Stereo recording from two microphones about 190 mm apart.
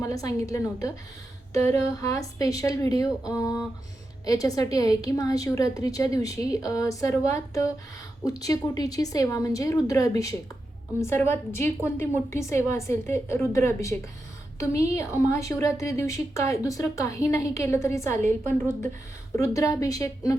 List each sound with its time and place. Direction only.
0.0 s a woman's voice: 20° left (ahead or behind)
19.4 s a woman's voice: 15° left (ahead or behind)